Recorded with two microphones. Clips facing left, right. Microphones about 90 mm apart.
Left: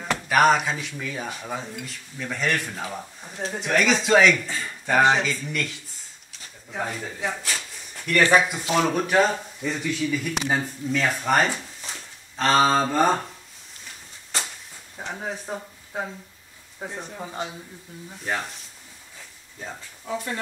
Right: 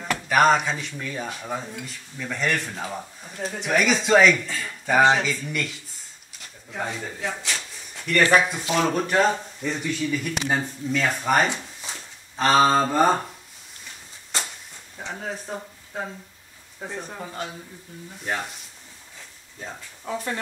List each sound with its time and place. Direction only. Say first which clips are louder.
0.0 s speech: even; centre (ahead or behind)
6.8 s speech: left 1 dB; centre (ahead or behind)
15.0 s a man's voice: left 1 dB; 10° left (ahead or behind)
18.2 s speech: even; 5° right (ahead or behind)